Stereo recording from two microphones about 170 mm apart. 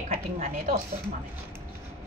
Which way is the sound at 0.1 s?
40° right (ahead or behind).